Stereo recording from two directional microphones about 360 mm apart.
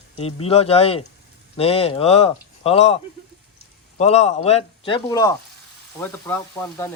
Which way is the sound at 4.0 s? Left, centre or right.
Centre.